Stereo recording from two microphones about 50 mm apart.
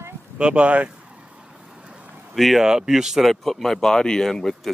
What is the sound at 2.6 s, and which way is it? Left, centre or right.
Speech, centre.